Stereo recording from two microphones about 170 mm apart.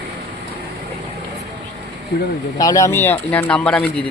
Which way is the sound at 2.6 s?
20° left (ahead or behind).